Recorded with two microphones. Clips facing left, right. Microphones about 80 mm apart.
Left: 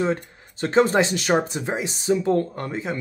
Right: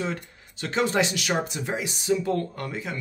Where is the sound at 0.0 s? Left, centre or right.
Left.